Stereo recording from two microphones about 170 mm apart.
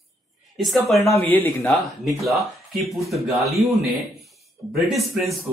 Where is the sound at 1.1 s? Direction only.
10° left (ahead or behind).